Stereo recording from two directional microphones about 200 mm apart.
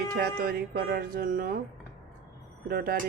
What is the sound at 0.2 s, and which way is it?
Speech, 50° right (ahead or behind).